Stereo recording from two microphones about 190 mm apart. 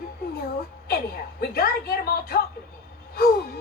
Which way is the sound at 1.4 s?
50° left (ahead or behind).